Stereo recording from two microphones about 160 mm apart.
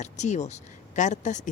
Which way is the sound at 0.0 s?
45° left (ahead or behind).